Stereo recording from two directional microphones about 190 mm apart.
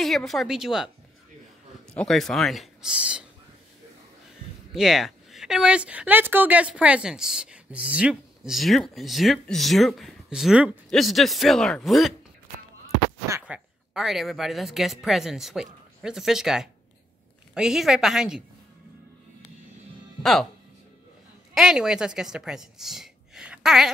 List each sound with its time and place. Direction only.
0.0 s speech: centre (ahead or behind)
2.0 s speech: centre (ahead or behind)
4.7 s speech: centre (ahead or behind)
13.3 s a woman's voice: 5° right (ahead or behind)
21.5 s speech: 5° right (ahead or behind)